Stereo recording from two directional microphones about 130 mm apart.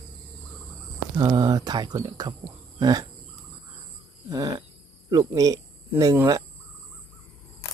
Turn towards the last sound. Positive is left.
turn(degrees=-20)  # may be behind; listen again after turning